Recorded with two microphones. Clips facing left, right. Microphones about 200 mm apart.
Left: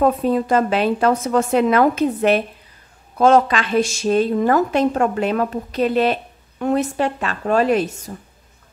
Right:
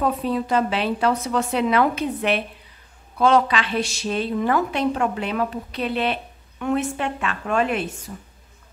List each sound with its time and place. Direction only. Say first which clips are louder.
0.0 s a woman's voice: left 6 dB; 45° left (ahead or behind)